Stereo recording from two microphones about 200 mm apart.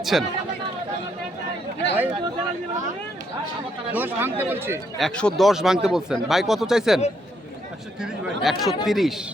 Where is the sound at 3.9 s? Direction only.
10° right (ahead or behind).